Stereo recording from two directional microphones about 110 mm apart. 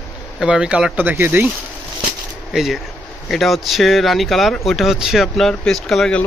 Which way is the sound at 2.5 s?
5° right (ahead or behind).